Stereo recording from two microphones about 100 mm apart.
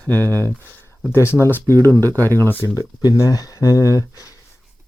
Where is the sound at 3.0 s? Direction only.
35° left (ahead or behind).